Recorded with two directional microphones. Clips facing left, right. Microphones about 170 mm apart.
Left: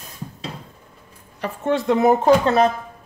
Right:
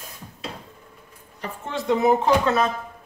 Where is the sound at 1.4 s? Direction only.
60° left (ahead or behind).